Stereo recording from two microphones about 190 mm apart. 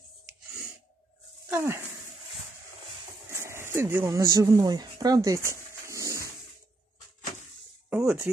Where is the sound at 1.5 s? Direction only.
15° right (ahead or behind).